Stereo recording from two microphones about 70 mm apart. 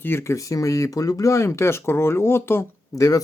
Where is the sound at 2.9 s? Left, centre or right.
Left.